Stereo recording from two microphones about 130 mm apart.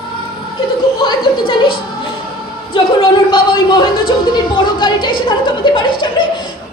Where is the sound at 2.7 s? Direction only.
40° left (ahead or behind).